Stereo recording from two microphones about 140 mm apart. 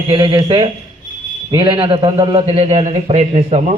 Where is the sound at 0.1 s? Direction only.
35° right (ahead or behind).